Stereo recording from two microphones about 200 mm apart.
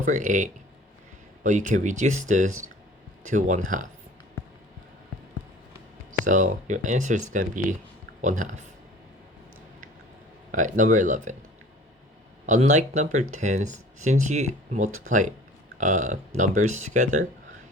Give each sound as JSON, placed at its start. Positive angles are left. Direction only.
{"t": 0.0, "sound": "speech", "side_deg": -40}
{"t": 6.1, "sound": "speech", "side_deg": -40}
{"t": 10.5, "sound": "speech", "side_deg": -40}
{"t": 12.5, "sound": "speech", "side_deg": -35}